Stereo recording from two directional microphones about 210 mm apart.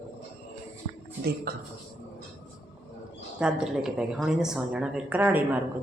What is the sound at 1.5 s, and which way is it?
Speech, 45° right (ahead or behind).